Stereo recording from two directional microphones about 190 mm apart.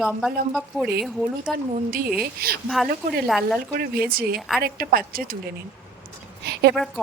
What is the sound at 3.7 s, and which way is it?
Speech, 50° right (ahead or behind).